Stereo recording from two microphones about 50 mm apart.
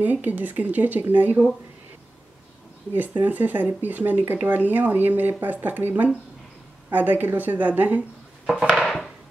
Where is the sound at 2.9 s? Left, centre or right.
Right.